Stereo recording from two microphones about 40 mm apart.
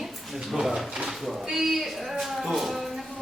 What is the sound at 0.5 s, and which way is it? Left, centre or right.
Speech, centre.